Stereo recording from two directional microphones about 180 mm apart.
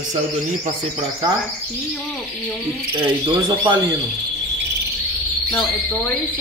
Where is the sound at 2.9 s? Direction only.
25° right (ahead or behind).